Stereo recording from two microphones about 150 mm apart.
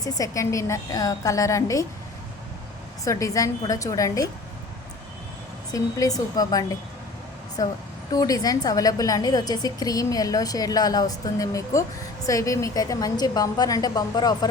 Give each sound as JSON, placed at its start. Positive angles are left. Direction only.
{"t": 0.0, "sound": "a woman's voice", "side_deg": 25}
{"t": 3.0, "sound": "a woman's voice", "side_deg": 20}
{"t": 5.7, "sound": "a woman's voice", "side_deg": 25}